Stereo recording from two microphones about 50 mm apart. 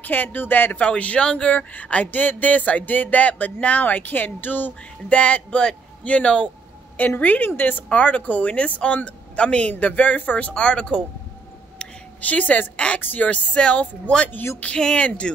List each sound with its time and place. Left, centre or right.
0.0 s speech: left
0.8 s speech: left
2.0 s speech: left
5.1 s speech: left
7.0 s speech: left
7.9 s speech: left
10.5 s speech: left
11.8 s a sound: left
12.7 s speech: left
13.0 s speech: left